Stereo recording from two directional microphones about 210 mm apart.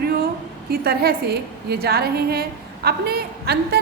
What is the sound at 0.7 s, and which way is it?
A woman's voice, 45° right (ahead or behind).